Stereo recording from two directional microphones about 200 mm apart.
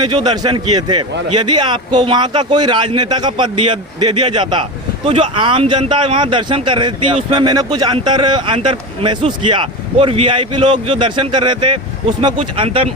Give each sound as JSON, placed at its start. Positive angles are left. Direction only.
{"t": 0.0, "sound": "speech", "side_deg": -20}